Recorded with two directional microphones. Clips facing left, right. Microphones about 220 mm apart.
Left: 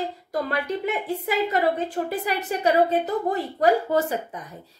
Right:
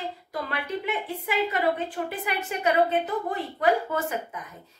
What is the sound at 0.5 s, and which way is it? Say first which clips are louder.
A woman's voice: left 2 dB; 40° left (ahead or behind).